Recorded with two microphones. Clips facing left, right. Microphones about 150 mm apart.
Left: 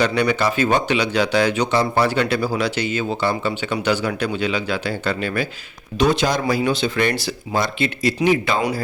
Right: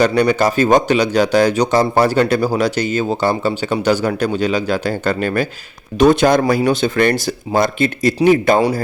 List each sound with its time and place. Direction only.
0.0 s speech: 45° right (ahead or behind)